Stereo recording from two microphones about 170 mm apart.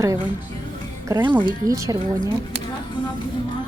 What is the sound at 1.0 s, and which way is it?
Speech, 15° right (ahead or behind).